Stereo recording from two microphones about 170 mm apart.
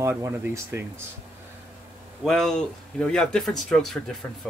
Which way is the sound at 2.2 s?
Centre (ahead or behind).